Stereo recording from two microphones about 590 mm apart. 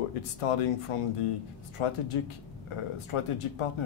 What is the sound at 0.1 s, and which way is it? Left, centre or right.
Speech, left.